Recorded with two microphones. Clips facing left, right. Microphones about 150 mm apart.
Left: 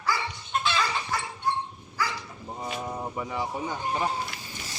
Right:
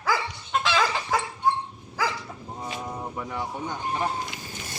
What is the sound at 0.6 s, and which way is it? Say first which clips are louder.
Chicken: right 4 dB; 90° right.